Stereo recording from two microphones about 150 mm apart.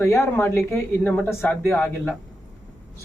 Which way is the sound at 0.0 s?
15° left (ahead or behind).